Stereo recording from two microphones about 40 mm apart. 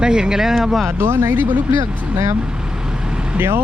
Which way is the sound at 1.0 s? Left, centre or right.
Right.